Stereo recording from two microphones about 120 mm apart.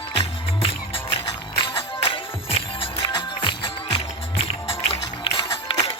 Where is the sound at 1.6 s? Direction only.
45° left (ahead or behind).